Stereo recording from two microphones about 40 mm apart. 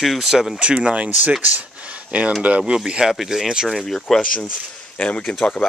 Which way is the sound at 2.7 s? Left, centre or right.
Centre.